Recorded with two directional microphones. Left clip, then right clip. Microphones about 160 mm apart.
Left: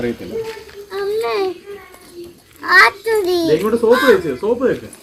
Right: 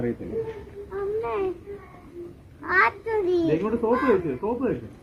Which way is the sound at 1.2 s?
10° left (ahead or behind).